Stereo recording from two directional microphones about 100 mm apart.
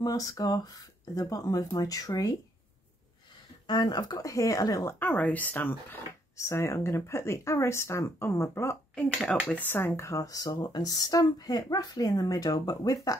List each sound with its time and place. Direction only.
0.0 s speech: 40° left (ahead or behind)
3.6 s speech: 45° left (ahead or behind)
4.9 s speech: 15° left (ahead or behind)
9.1 s speech: centre (ahead or behind)
9.5 s speech: 20° left (ahead or behind); by 13.1 s 40° left (ahead or behind)